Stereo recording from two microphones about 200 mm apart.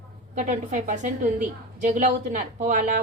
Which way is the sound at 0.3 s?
35° right (ahead or behind).